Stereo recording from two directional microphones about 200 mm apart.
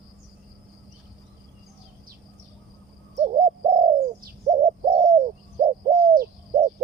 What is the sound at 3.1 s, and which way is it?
Bird, 30° right (ahead or behind).